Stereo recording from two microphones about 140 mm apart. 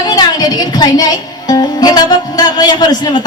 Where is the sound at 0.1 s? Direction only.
30° left (ahead or behind).